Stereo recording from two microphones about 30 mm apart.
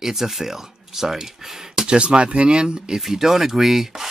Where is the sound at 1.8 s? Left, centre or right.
Right.